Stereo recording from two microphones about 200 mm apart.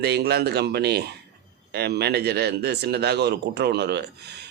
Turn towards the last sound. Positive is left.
turn(degrees=-55)  # may be behind; listen again after turning